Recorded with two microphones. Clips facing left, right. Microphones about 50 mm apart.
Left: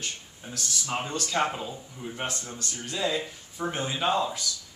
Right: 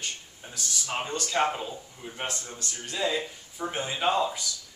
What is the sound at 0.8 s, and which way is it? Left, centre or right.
Speech, centre.